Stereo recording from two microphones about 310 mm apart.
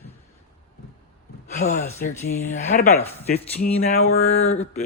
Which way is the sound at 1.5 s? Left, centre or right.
Left.